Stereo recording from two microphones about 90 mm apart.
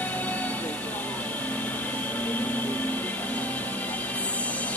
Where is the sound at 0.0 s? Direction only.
20° left (ahead or behind).